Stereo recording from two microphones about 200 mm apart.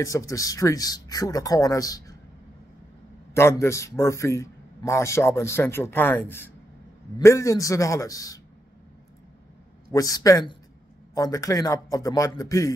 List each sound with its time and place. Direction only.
0.0 s a man's voice: 15° left (ahead or behind)
3.3 s a man's voice: 15° left (ahead or behind)
9.9 s a man's voice: 15° left (ahead or behind)